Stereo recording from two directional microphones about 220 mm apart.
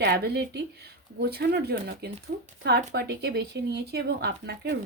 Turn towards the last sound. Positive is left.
turn(degrees=-50)  # may be behind; listen again after turning